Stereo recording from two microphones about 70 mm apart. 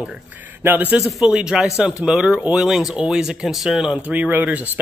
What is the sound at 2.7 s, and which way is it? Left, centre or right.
Speech, centre.